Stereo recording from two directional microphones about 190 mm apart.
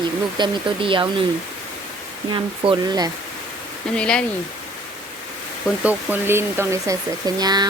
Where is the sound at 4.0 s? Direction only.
5° left (ahead or behind).